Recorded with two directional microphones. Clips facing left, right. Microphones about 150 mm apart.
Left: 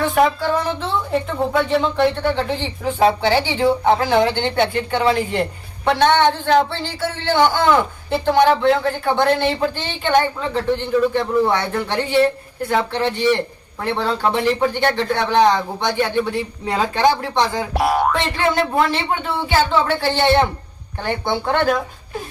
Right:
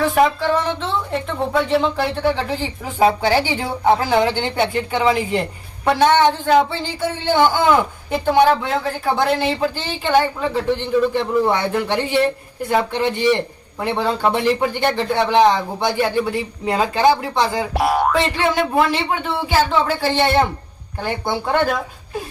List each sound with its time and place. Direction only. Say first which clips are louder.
0.0 s speech: right 1 dB; centre (ahead or behind)